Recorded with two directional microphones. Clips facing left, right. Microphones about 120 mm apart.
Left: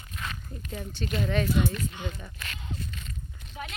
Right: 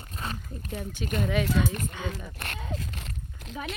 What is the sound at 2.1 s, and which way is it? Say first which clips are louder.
Biting: right 4 dB; 60° right (ahead or behind).